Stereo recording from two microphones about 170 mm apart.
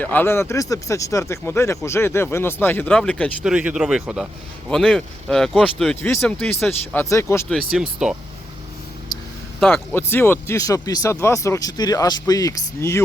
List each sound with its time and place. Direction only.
0.0 s speech: 10° left (ahead or behind)
3.4 s speech: 5° right (ahead or behind)
6.0 s speech: 15° left (ahead or behind)
7.7 s speech: 5° right (ahead or behind)
9.6 s speech: 5° left (ahead or behind)